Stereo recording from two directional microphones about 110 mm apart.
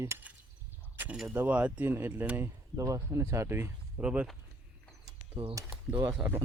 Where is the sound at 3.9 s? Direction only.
10° right (ahead or behind).